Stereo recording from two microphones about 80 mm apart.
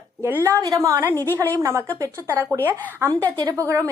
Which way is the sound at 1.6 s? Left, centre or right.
Right.